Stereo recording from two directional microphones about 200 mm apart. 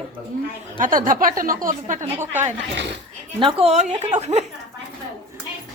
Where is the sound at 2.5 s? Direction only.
60° right (ahead or behind).